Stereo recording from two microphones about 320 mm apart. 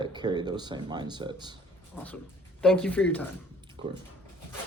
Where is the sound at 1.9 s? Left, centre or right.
Centre.